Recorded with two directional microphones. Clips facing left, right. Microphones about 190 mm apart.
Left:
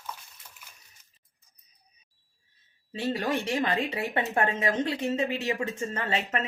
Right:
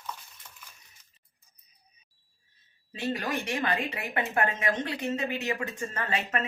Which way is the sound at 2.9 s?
30° left (ahead or behind).